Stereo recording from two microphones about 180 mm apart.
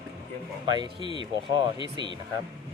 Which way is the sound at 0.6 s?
25° right (ahead or behind).